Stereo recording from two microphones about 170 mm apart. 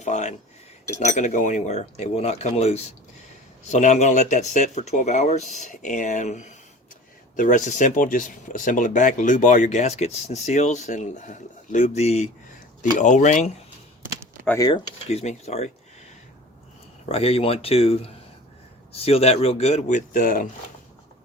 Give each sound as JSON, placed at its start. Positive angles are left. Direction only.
{"t": 0.0, "sound": "speech", "side_deg": 45}
{"t": 15.1, "sound": "speech", "side_deg": 40}
{"t": 17.1, "sound": "speech", "side_deg": 35}